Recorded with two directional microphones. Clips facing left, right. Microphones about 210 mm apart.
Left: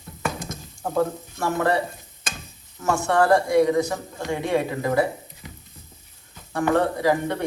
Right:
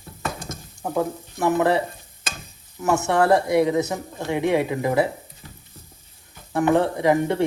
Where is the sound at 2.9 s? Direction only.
20° right (ahead or behind).